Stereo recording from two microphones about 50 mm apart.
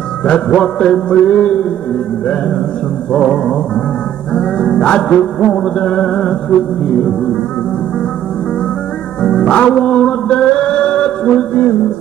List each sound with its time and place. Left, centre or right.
0.2 s music: left
3.1 s music: centre
9.2 s music: centre